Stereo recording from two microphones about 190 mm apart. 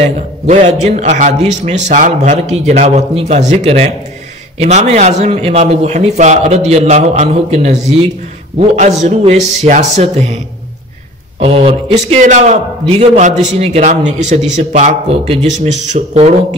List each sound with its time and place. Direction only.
0.5 s a man's voice: 35° right (ahead or behind)
11.3 s a man's voice: 30° right (ahead or behind)